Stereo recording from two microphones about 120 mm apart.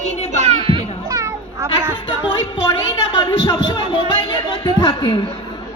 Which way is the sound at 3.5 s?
35° left (ahead or behind).